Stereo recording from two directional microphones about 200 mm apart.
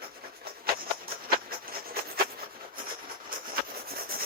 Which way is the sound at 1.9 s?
50° right (ahead or behind).